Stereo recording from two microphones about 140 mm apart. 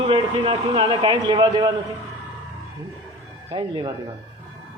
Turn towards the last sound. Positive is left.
turn(degrees=-30)  # may be behind; listen again after turning